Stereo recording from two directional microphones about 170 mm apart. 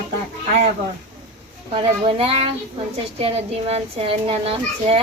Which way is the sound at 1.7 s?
35° right (ahead or behind).